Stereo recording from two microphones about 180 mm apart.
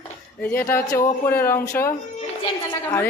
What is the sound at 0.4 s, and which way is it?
Speech, 15° left (ahead or behind).